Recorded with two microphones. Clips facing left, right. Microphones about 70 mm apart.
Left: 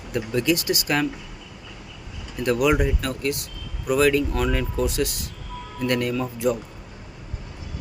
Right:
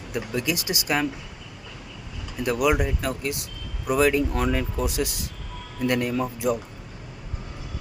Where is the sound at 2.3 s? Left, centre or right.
Centre.